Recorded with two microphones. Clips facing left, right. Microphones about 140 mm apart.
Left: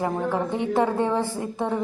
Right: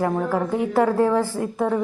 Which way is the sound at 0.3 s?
5° right (ahead or behind).